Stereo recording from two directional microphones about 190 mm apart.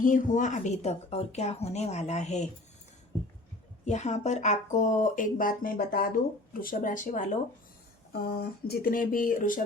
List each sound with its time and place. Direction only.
0.0 s speech: 45° left (ahead or behind)
3.8 s speech: 40° left (ahead or behind)
8.1 s speech: 55° left (ahead or behind)